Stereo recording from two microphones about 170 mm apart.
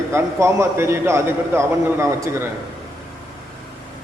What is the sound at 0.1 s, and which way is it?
A man's voice, 15° right (ahead or behind).